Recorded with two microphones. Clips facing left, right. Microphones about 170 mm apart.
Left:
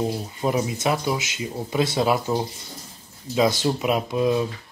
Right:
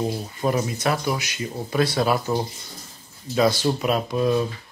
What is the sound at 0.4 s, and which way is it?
Speech, 15° left (ahead or behind).